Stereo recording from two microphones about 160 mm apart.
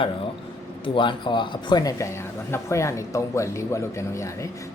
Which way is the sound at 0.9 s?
30° left (ahead or behind).